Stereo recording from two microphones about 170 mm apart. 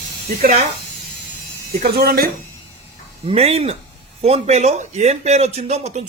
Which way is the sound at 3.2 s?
35° right (ahead or behind).